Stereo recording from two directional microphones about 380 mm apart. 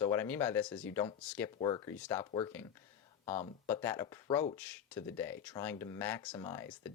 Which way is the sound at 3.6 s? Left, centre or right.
Centre.